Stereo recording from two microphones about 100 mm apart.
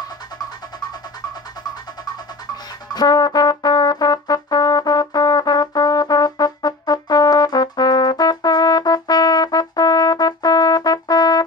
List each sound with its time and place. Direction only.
2.0 s trumpet: 40° left (ahead or behind)